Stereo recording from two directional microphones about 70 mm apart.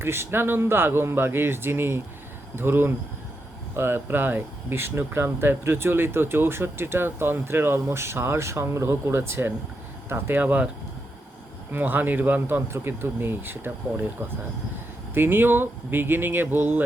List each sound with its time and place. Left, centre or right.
0.0 s speech: right
11.7 s speech: right
15.1 s speech: right